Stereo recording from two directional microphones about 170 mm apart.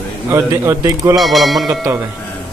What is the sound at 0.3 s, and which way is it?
Speech, 15° right (ahead or behind).